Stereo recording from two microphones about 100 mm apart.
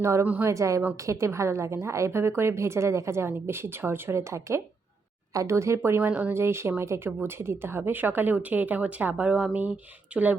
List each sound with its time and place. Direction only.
0.0 s a woman's voice: 30° right (ahead or behind)
9.3 s a woman's voice: 5° right (ahead or behind)